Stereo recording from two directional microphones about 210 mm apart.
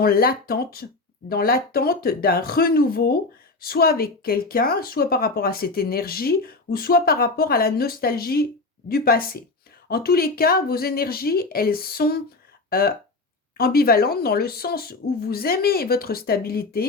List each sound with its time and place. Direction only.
0.0 s speech: 45° left (ahead or behind)